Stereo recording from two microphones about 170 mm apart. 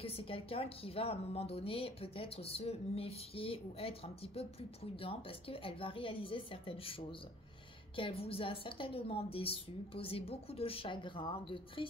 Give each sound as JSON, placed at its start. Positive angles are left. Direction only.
{"t": 0.0, "sound": "a woman's voice", "side_deg": 35}